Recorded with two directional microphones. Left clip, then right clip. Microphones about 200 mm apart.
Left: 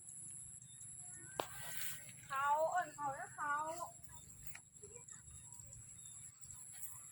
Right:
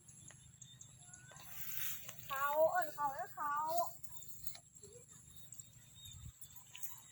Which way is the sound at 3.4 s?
50° right (ahead or behind).